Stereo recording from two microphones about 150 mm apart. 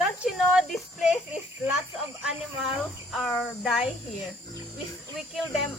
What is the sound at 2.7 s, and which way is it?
Speech, centre (ahead or behind).